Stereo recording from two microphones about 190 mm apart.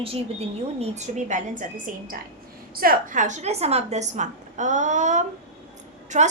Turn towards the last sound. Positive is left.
turn(degrees=-40)  # may be behind; listen again after turning